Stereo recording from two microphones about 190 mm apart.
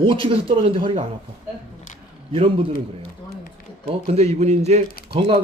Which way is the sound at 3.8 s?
30° right (ahead or behind).